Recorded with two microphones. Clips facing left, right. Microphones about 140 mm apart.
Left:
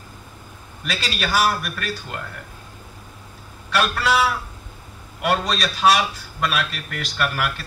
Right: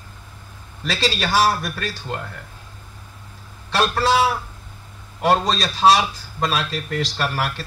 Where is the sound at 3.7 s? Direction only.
35° right (ahead or behind).